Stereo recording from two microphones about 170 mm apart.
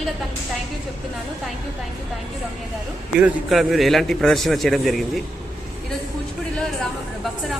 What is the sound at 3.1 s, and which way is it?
A man's voice, 5° right (ahead or behind).